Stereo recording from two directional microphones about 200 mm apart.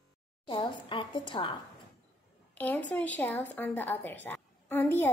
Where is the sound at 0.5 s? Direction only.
25° left (ahead or behind).